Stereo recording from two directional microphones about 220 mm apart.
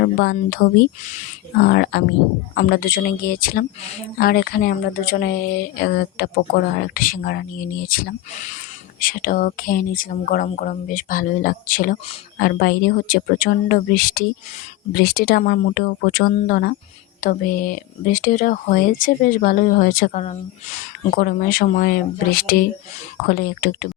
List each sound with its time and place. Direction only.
0.0 s speech: 45° left (ahead or behind)